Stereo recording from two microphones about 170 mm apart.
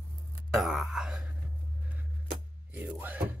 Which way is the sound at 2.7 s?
10° right (ahead or behind).